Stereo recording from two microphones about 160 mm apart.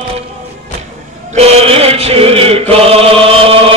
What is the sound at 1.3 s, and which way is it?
Chant, 40° right (ahead or behind).